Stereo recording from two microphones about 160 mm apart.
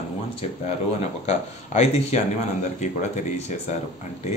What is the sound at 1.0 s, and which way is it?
Speech, 45° left (ahead or behind).